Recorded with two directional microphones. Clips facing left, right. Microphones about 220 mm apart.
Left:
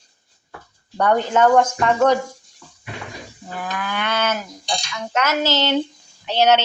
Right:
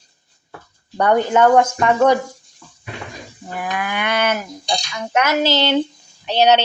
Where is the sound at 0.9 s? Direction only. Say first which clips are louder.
Right 3 dB; 10° right (ahead or behind).